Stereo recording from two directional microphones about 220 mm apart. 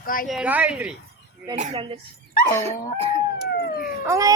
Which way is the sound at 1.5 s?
30° right (ahead or behind).